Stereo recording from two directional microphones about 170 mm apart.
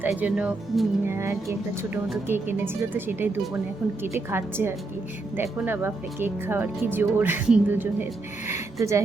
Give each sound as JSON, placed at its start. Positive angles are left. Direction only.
{"t": 0.0, "sound": "speech", "side_deg": -10}
{"t": 4.3, "sound": "speech", "side_deg": -15}